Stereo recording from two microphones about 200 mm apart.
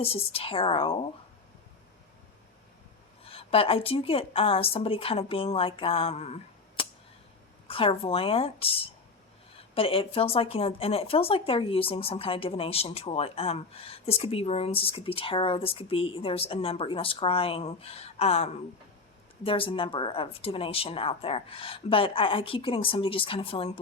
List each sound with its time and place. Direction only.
0.0 s speech: 30° left (ahead or behind)
3.2 s speech: 30° left (ahead or behind)